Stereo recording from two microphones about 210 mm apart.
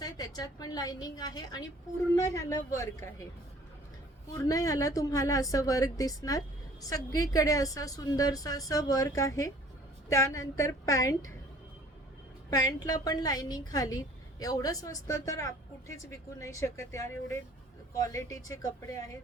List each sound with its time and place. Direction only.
0.0 s a woman's voice: 20° left (ahead or behind)
4.4 s a woman's voice: 15° left (ahead or behind)
12.5 s a woman's voice: 15° left (ahead or behind)